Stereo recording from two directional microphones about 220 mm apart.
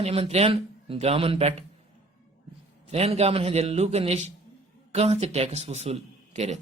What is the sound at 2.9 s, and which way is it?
A woman's voice, 30° right (ahead or behind).